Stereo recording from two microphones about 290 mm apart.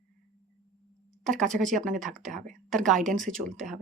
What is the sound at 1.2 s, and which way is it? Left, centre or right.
Speech, centre.